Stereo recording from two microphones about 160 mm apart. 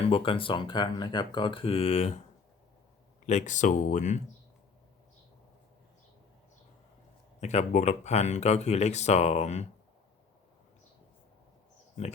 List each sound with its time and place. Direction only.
0.0 s speech: 35° left (ahead or behind)
3.2 s speech: 50° left (ahead or behind)
7.4 s speech: 45° left (ahead or behind)